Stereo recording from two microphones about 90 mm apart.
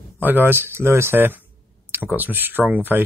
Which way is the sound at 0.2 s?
20° right (ahead or behind).